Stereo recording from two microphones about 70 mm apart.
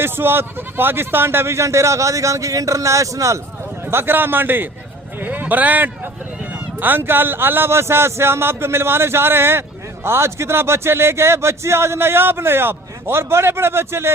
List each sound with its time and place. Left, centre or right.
0.0 s speech: right
3.8 s a man's voice: right